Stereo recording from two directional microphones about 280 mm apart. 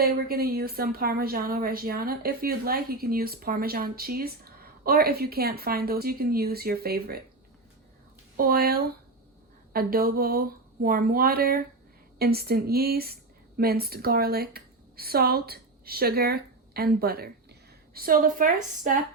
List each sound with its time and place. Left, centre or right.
0.0 s a woman's voice: right
8.4 s a woman's voice: right